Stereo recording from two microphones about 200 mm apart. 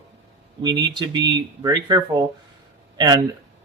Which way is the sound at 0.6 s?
20° right (ahead or behind).